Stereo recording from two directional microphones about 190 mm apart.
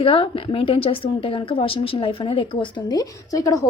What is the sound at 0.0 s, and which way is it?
Speech, 30° left (ahead or behind).